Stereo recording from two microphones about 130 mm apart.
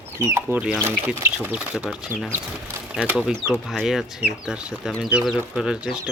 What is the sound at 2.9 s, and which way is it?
Speech, 5° right (ahead or behind).